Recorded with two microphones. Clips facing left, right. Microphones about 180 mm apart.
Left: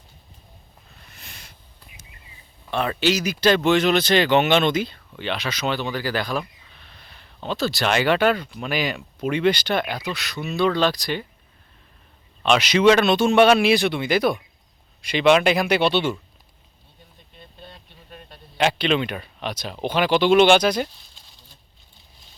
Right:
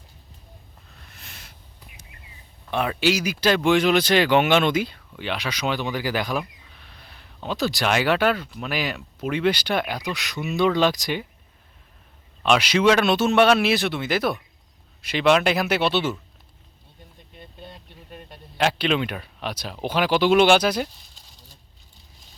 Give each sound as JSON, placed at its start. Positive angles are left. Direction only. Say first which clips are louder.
{"t": 0.9, "sound": "a sound", "louder": "left 1 dB", "side_deg": 0}
{"t": 2.6, "sound": "speech", "louder": "even", "side_deg": -10}
{"t": 12.4, "sound": "speech", "louder": "left 1 dB", "side_deg": -5}
{"t": 17.6, "sound": "vehicle", "louder": "right 2 dB", "side_deg": -10}
{"t": 18.5, "sound": "speech", "louder": "left 1 dB", "side_deg": 0}
{"t": 21.3, "sound": "a sound", "louder": "right 1 dB", "side_deg": -40}